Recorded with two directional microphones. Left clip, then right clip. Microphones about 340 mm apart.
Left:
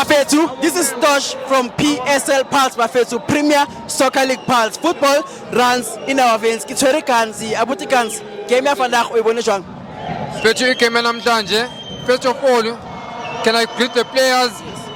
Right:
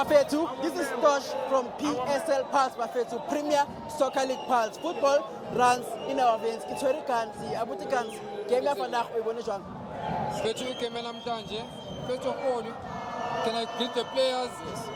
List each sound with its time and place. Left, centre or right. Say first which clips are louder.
0.0 s speech: left 10 dB; centre
10.4 s speech: left 17 dB; left
13.4 s a man's voice: left 17 dB; left